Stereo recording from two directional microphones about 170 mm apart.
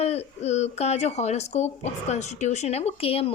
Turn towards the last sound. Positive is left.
turn(degrees=35)  # may be behind; listen again after turning